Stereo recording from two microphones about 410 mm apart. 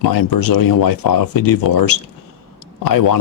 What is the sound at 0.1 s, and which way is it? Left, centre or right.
Speech, left.